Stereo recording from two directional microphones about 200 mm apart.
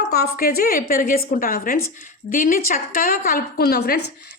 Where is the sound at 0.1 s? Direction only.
50° left (ahead or behind).